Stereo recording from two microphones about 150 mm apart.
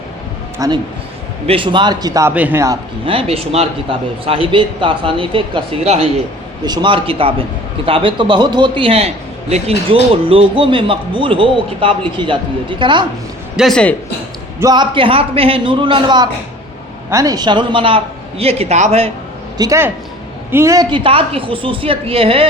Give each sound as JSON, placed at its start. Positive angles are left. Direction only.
{"t": 0.6, "sound": "a man's voice", "side_deg": -20}
{"t": 1.5, "sound": "a man's voice", "side_deg": -35}
{"t": 2.3, "sound": "speech", "side_deg": -10}
{"t": 3.1, "sound": "a man's voice", "side_deg": -40}
{"t": 13.6, "sound": "speech", "side_deg": 5}
{"t": 14.6, "sound": "a man's voice", "side_deg": -30}
{"t": 19.5, "sound": "a man's voice", "side_deg": -20}
{"t": 20.9, "sound": "a man's voice", "side_deg": -35}